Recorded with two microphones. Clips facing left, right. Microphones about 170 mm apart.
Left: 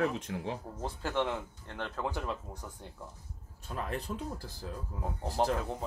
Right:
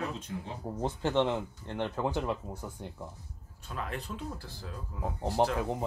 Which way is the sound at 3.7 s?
35° left (ahead or behind).